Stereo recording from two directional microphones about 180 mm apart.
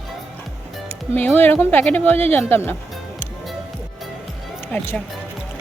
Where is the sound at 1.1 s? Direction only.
10° left (ahead or behind).